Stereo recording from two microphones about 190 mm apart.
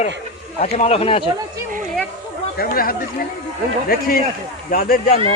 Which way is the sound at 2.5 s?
50° left (ahead or behind).